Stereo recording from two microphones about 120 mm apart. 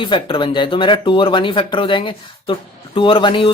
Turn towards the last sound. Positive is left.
turn(degrees=45)  # may be behind; listen again after turning